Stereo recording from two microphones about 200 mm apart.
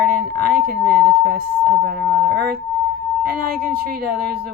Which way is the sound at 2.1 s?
50° right (ahead or behind).